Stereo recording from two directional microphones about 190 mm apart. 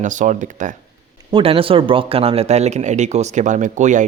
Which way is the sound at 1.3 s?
30° right (ahead or behind).